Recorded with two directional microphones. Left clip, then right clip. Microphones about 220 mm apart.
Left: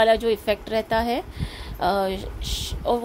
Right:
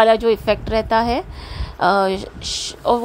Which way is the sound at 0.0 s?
15° right (ahead or behind).